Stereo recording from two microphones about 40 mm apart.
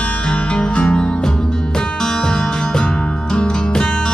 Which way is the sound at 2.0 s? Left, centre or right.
Centre.